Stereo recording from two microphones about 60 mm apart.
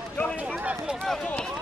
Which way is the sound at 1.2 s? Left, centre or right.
Centre.